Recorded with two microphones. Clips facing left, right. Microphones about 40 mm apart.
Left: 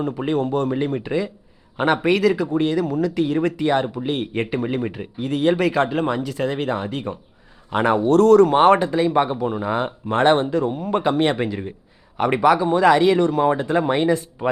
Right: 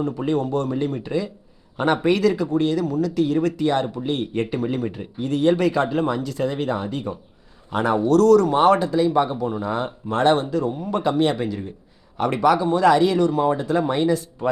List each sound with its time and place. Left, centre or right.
0.1 s speech: centre
2.0 s speech: centre
5.9 s speech: centre
10.8 s speech: left
11.0 s speech: left
12.1 s speech: centre